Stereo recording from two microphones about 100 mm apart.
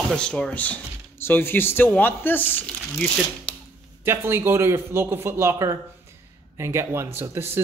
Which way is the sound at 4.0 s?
25° right (ahead or behind).